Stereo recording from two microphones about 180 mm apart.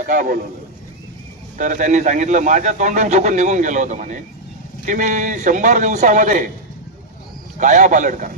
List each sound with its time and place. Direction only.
0.0 s a man's voice: 45° right (ahead or behind)
1.5 s a man's voice: 45° right (ahead or behind)
7.6 s a man's voice: 45° right (ahead or behind)